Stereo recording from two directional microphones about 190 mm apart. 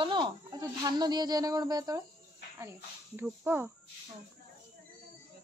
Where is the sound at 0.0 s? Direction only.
25° right (ahead or behind).